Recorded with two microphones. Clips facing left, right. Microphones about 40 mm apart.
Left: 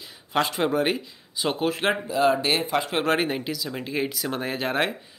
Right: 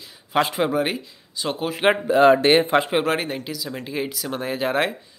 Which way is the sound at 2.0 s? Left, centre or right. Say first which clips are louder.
Right 8 dB; right.